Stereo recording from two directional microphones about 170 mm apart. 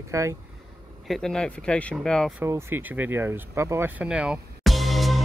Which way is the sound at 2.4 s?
15° right (ahead or behind).